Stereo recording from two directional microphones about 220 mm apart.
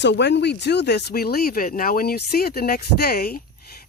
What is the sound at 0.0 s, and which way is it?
Speech, 55° left (ahead or behind).